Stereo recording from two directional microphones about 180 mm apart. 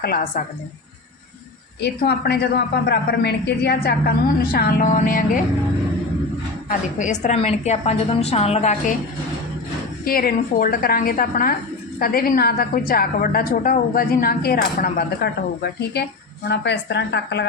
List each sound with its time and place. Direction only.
0.0 s a woman's voice: 55° left (ahead or behind)
1.8 s a woman's voice: 65° left (ahead or behind)
4.5 s a woman's voice: 50° left (ahead or behind)
6.7 s a woman's voice: 45° left (ahead or behind)
10.0 s a woman's voice: 55° left (ahead or behind); by 17.4 s 75° left (ahead or behind)